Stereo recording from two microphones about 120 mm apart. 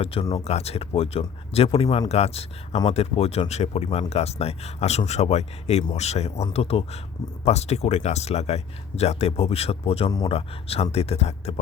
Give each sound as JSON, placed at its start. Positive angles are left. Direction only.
{"t": 0.0, "sound": "speech", "side_deg": 55}